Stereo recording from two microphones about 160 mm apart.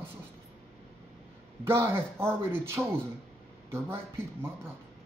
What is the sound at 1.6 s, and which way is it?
Speech, 15° right (ahead or behind).